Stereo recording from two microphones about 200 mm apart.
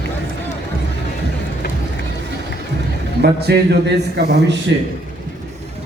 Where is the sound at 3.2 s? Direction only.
55° right (ahead or behind).